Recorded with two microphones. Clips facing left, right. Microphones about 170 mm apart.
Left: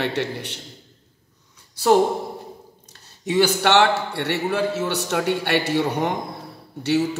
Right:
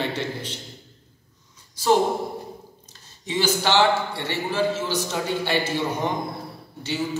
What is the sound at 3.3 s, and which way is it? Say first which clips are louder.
A man's voice: left 4 dB; 65° left (ahead or behind).